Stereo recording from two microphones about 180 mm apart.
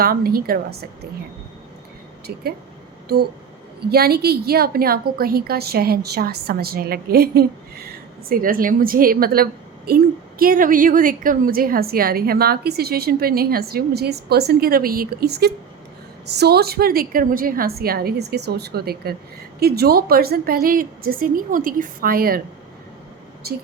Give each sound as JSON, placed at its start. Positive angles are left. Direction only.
{"t": 0.0, "sound": "a woman's voice", "side_deg": -55}
{"t": 2.2, "sound": "a woman's voice", "side_deg": -60}
{"t": 3.8, "sound": "a woman's voice", "side_deg": -60}